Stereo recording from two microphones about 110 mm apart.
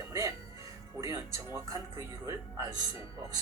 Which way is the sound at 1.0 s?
30° right (ahead or behind).